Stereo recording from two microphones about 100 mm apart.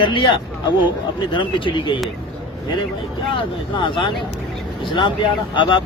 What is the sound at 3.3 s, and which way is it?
Speech, 55° left (ahead or behind).